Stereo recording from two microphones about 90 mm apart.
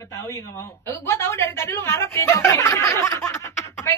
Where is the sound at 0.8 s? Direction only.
30° left (ahead or behind).